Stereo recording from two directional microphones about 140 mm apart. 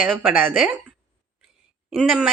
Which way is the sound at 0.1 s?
Centre (ahead or behind).